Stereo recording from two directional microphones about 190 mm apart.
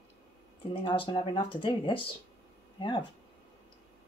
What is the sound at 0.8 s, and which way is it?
Speech, 25° left (ahead or behind).